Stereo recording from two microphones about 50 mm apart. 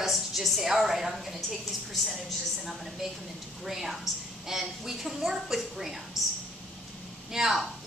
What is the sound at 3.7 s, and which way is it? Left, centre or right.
A woman's voice, centre.